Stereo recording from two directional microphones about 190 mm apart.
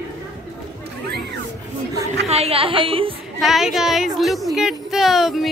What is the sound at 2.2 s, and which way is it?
Speech, 35° right (ahead or behind).